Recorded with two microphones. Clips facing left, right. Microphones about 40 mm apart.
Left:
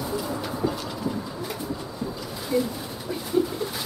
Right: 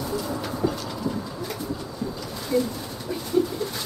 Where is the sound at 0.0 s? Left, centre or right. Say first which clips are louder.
Even; centre.